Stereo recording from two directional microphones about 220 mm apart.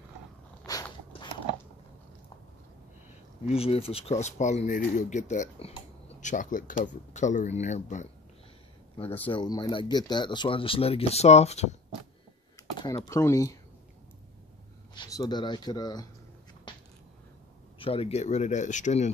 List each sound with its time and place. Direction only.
0.7 s a sound: 15° left (ahead or behind)
3.4 s speech: 25° left (ahead or behind)
9.3 s speech: 20° left (ahead or behind)
12.7 s speech: 20° left (ahead or behind)
15.0 s speech: 15° left (ahead or behind)
17.7 s speech: 25° left (ahead or behind)